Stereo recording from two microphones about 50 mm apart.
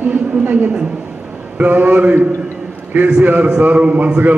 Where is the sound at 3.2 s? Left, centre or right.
Right.